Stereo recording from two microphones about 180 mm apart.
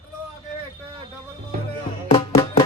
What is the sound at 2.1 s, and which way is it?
Music, 30° left (ahead or behind).